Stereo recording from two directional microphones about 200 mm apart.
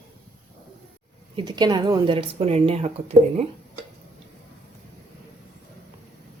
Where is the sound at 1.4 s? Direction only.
20° right (ahead or behind).